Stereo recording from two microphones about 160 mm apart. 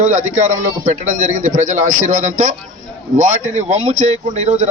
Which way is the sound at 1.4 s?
50° right (ahead or behind).